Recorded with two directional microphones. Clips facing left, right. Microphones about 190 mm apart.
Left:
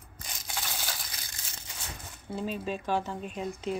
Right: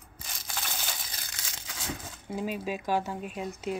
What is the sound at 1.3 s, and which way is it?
Crumpling, 90° right.